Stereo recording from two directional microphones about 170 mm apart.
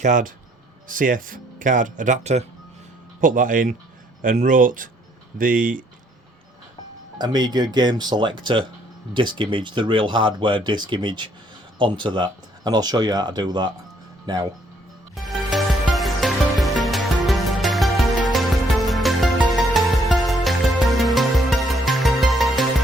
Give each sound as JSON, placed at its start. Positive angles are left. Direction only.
{"t": 0.0, "sound": "speech", "side_deg": -50}
{"t": 7.2, "sound": "speech", "side_deg": -25}
{"t": 15.1, "sound": "music", "side_deg": 0}